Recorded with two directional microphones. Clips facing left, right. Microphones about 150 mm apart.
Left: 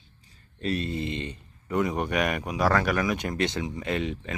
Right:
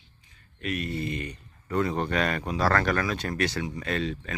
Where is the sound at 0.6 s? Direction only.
30° left (ahead or behind).